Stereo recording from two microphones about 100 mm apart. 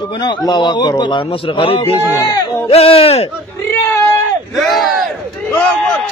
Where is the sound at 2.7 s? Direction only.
75° left (ahead or behind).